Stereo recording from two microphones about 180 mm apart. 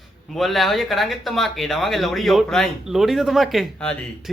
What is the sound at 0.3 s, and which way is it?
Speech, centre (ahead or behind).